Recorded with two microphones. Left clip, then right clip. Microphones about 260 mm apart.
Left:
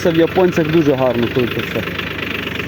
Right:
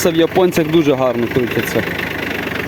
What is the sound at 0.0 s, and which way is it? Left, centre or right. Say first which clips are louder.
Speech: even; right.